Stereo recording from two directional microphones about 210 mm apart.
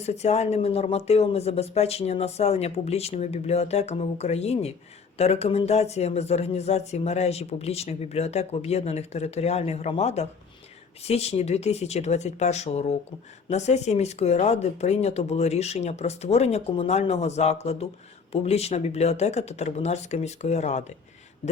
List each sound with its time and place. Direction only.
0.0 s speech: 30° left (ahead or behind)